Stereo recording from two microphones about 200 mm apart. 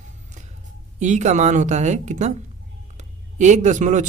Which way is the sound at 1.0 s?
35° right (ahead or behind).